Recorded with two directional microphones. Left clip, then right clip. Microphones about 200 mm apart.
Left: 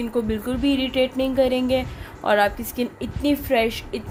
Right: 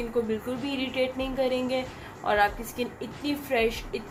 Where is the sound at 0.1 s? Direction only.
50° left (ahead or behind).